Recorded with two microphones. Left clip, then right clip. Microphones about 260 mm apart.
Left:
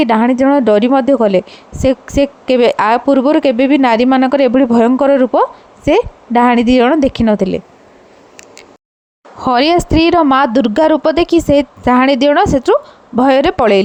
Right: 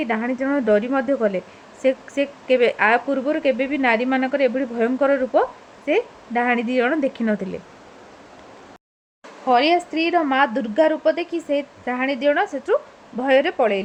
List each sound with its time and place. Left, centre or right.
0.0 s a woman's voice: left
9.5 s a woman's voice: left